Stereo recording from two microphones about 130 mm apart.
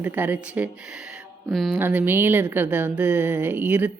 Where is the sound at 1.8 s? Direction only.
15° right (ahead or behind).